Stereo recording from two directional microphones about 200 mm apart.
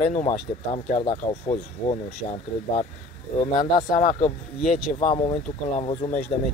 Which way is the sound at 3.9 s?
40° left (ahead or behind).